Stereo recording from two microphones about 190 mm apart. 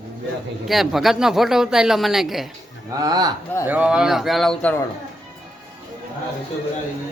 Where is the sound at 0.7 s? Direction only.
Centre (ahead or behind).